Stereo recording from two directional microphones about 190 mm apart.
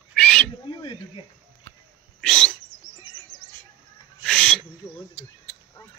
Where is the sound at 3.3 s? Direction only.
20° left (ahead or behind).